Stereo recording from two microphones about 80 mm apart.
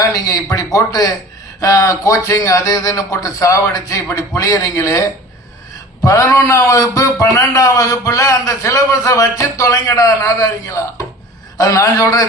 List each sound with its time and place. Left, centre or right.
0.0 s a man's voice: left
6.1 s a man's voice: left